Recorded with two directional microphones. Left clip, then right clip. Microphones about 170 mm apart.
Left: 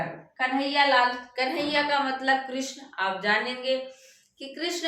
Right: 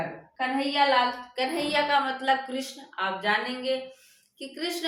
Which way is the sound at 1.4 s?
25° right (ahead or behind).